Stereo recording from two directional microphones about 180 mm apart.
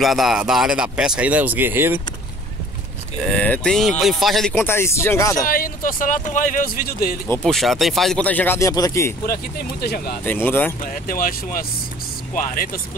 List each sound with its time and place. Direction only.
0.0 s speech: centre (ahead or behind)
3.3 s speech: 10° left (ahead or behind)
5.5 s speech: 50° left (ahead or behind)
7.4 s speech: centre (ahead or behind); by 9.1 s 20° left (ahead or behind)
9.2 s speech: 55° left (ahead or behind)
10.2 s speech: 10° left (ahead or behind)
10.8 s speech: 50° left (ahead or behind)